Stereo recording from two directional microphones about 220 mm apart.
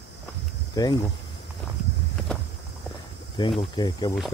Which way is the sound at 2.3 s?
5° left (ahead or behind).